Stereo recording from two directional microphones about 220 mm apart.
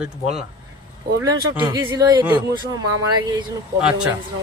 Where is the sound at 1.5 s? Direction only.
15° right (ahead or behind).